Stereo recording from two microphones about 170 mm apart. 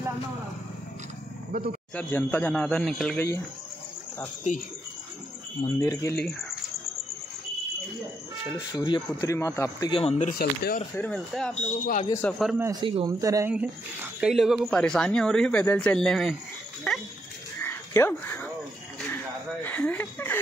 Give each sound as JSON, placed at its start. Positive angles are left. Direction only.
{"t": 1.5, "sound": "speech", "side_deg": -60}
{"t": 2.0, "sound": "a man's voice", "side_deg": 10}
{"t": 5.6, "sound": "a man's voice", "side_deg": 20}
{"t": 8.7, "sound": "a man's voice", "side_deg": 25}
{"t": 9.8, "sound": "speech", "side_deg": 35}
{"t": 10.3, "sound": "speech", "side_deg": 60}
{"t": 11.0, "sound": "speech", "side_deg": 5}
{"t": 11.8, "sound": "speech", "side_deg": 50}
{"t": 12.1, "sound": "a man's voice", "side_deg": 10}
{"t": 12.8, "sound": "a man's voice", "side_deg": -30}
{"t": 13.2, "sound": "a man's voice", "side_deg": -20}
{"t": 14.2, "sound": "speech", "side_deg": 0}
{"t": 17.6, "sound": "dog", "side_deg": 15}
{"t": 18.9, "sound": "speech", "side_deg": 10}